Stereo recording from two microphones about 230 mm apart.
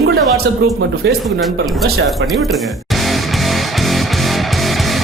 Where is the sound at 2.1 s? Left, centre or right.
Centre.